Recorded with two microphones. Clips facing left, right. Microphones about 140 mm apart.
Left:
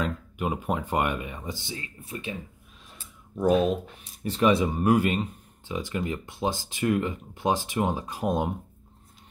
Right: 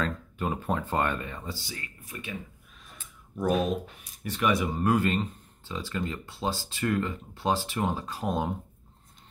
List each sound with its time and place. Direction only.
0.0 s speech: 15° left (ahead or behind)
4.2 s speech: 30° left (ahead or behind)
4.7 s speech: 15° left (ahead or behind)